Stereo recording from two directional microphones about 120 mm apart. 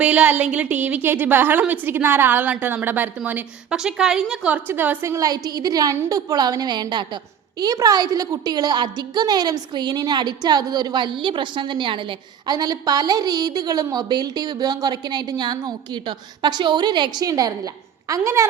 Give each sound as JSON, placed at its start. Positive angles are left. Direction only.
{"t": 0.0, "sound": "a woman's voice", "side_deg": -10}